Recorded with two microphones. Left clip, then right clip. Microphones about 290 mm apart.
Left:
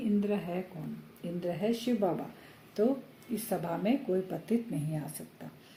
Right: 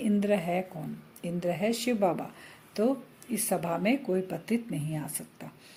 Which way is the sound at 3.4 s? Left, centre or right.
Right.